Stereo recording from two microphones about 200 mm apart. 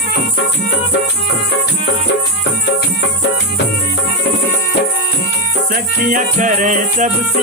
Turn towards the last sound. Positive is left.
turn(degrees=-40)  # may be behind; listen again after turning